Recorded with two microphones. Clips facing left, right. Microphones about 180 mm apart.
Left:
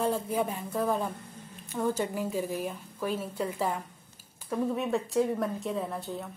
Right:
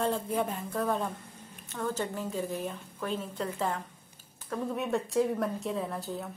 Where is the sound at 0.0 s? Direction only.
5° left (ahead or behind).